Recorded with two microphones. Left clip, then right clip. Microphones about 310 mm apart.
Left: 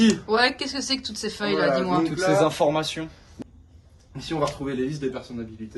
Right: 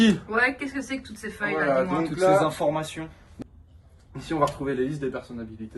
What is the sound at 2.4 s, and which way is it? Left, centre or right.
Speech, left.